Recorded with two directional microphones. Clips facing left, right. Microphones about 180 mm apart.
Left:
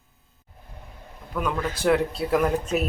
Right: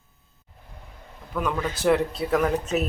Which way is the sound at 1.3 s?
Centre (ahead or behind).